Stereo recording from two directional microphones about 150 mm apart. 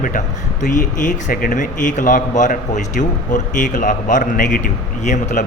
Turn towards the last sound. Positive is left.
turn(degrees=55)  # may be behind; listen again after turning